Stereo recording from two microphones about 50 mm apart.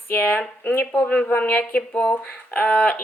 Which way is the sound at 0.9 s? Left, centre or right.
Left.